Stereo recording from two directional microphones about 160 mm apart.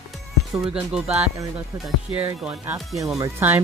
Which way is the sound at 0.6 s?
5° right (ahead or behind).